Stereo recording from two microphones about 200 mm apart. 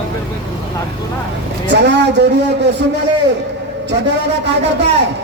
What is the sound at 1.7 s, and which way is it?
A man's voice, 60° right (ahead or behind).